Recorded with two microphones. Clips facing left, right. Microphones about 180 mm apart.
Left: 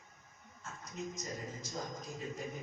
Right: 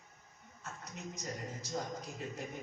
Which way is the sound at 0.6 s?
65° right (ahead or behind).